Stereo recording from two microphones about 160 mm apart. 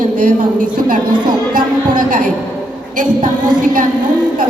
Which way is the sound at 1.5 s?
60° right (ahead or behind).